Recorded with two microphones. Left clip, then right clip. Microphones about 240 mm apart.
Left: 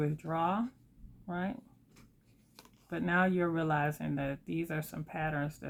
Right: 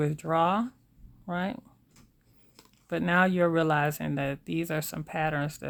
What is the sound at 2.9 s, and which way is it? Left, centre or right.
Speech, right.